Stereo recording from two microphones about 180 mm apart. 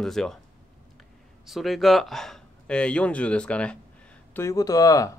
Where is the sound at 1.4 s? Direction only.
Centre (ahead or behind); by 5.1 s 20° left (ahead or behind).